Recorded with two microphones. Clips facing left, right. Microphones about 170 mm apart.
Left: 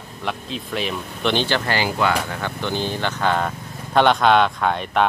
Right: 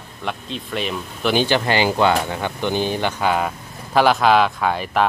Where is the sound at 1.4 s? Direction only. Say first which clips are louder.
Right 4 dB; 15° right (ahead or behind).